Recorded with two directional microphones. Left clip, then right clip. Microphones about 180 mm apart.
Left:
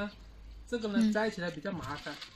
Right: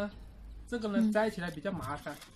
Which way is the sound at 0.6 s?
10° right (ahead or behind).